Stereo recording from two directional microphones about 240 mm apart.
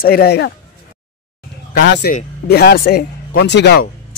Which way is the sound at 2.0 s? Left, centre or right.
Left.